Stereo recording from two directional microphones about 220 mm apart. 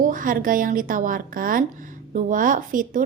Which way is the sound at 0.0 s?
40° right (ahead or behind).